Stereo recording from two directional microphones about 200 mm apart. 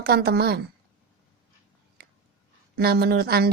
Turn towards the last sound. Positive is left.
turn(degrees=-50)  # may be behind; listen again after turning